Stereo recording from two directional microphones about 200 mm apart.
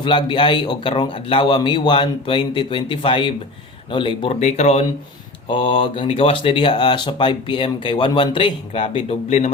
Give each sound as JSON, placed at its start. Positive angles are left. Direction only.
{"t": 0.0, "sound": "speech", "side_deg": 25}